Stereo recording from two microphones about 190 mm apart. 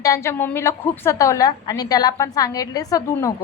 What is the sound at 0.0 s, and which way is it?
A woman's voice, 15° left (ahead or behind).